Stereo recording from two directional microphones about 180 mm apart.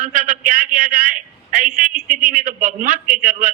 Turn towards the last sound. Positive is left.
turn(degrees=-45)  # may be behind; listen again after turning